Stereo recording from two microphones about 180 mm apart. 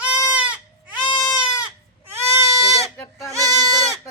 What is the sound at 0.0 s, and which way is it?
Goat, 5° right (ahead or behind).